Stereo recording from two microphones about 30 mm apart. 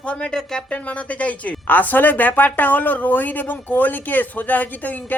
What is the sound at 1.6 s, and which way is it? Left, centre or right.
Speech, left.